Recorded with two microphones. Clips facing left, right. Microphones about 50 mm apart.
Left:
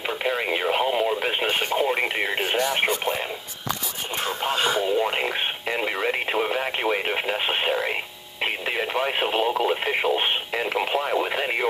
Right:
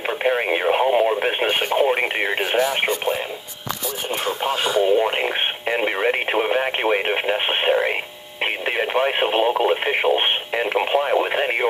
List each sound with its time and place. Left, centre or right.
0.0 s radio: right
2.5 s radio: centre
4.2 s radio: right
8.6 s speech: right
10.5 s radio: centre